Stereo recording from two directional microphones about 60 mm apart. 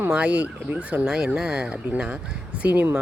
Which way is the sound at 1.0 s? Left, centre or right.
Centre.